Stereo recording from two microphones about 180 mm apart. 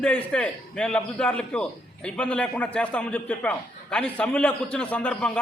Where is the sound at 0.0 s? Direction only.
5° left (ahead or behind).